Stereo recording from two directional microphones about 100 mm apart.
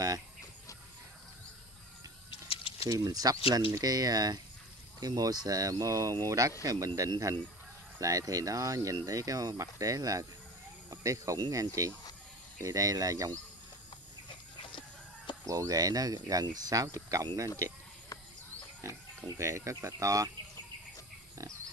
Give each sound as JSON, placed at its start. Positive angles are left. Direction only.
{"t": 2.5, "sound": "a sound", "side_deg": 65}
{"t": 2.9, "sound": "speech", "side_deg": -35}
{"t": 14.6, "sound": "chicken", "side_deg": 55}
{"t": 15.4, "sound": "speech", "side_deg": -35}
{"t": 18.8, "sound": "speech", "side_deg": -30}